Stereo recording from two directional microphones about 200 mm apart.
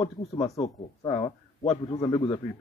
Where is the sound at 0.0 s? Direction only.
20° left (ahead or behind).